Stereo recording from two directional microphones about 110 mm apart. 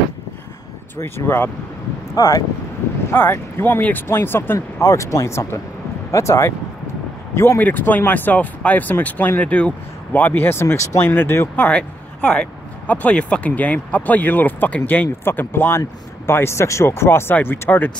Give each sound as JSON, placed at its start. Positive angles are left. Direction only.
{"t": 0.9, "sound": "speech", "side_deg": 20}
{"t": 2.1, "sound": "speech", "side_deg": 35}
{"t": 3.1, "sound": "speech", "side_deg": 20}